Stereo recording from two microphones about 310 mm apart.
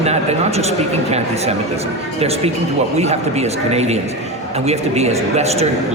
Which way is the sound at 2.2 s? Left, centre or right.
Centre.